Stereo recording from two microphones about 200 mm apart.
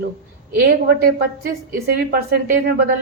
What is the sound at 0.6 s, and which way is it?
A woman's voice, 50° right (ahead or behind).